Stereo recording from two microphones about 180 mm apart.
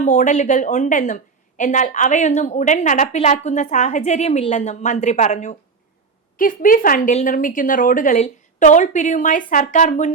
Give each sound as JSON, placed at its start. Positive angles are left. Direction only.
{"t": 0.0, "sound": "a woman's voice", "side_deg": 45}